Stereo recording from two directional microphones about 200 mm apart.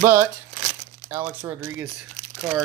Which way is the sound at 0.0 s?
10° right (ahead or behind).